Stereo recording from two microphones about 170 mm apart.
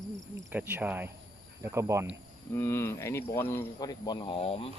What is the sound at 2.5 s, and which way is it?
Speech, 15° left (ahead or behind).